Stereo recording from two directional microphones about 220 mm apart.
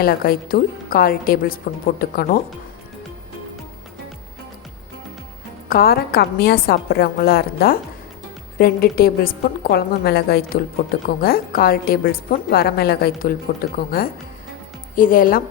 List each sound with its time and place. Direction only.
0.0 s a woman's voice: 40° left (ahead or behind)
5.6 s a woman's voice: 40° left (ahead or behind)